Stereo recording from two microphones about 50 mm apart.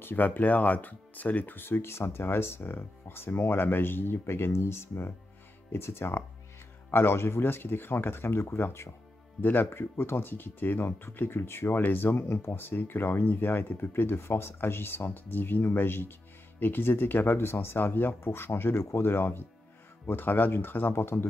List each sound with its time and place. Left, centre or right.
0.0 s speech: left
4.5 s speech: left
9.4 s speech: left
9.7 s speech: left
11.7 s speech: left
17.7 s speech: left
20.1 s speech: left